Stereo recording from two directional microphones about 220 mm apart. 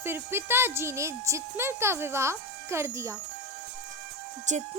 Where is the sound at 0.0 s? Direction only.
10° right (ahead or behind).